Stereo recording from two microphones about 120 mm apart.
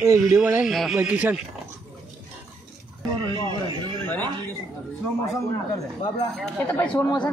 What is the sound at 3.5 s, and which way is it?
Speech, 40° right (ahead or behind).